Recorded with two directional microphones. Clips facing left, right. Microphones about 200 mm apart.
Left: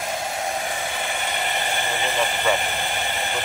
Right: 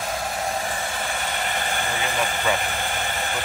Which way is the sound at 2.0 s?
Centre (ahead or behind).